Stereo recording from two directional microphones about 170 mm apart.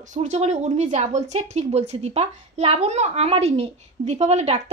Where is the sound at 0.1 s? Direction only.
45° right (ahead or behind).